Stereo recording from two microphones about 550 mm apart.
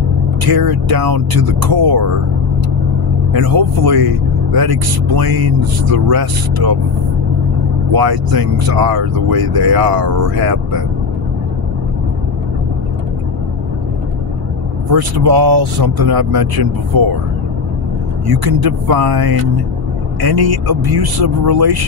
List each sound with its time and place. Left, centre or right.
0.4 s speech: right
3.3 s speech: right
7.9 s speech: right
14.9 s speech: right
18.2 s speech: right